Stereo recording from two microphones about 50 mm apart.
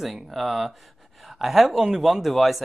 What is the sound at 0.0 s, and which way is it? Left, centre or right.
Speech, centre.